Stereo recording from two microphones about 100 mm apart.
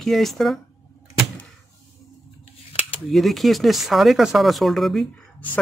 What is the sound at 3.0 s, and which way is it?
Speech, centre (ahead or behind).